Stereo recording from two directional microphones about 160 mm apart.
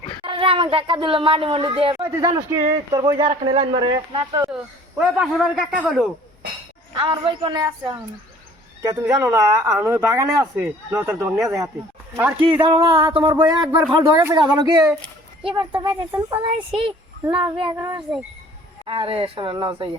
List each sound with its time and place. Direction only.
0.3 s speech: 35° right (ahead or behind)
2.0 s speech: 15° right (ahead or behind)
4.4 s speech: 10° right (ahead or behind)
6.9 s speech: 30° right (ahead or behind); by 12.6 s 15° right (ahead or behind)
12.6 s speech: 35° right (ahead or behind)